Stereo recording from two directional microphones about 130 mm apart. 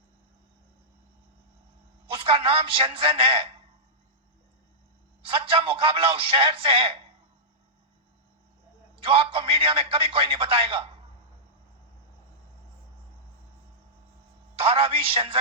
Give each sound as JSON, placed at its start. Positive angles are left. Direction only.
{"t": 2.0, "sound": "a man's voice", "side_deg": -45}
{"t": 5.2, "sound": "a man's voice", "side_deg": -45}
{"t": 9.0, "sound": "a man's voice", "side_deg": -45}
{"t": 14.6, "sound": "a man's voice", "side_deg": -45}